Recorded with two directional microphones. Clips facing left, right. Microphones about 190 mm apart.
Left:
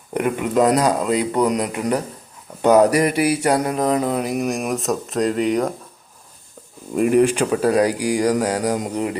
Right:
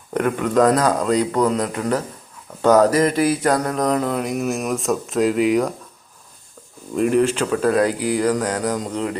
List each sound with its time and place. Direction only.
0.1 s speech: 10° left (ahead or behind)
6.9 s speech: 10° left (ahead or behind)